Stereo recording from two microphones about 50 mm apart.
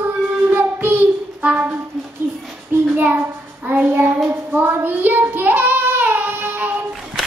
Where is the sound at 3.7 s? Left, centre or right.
Right.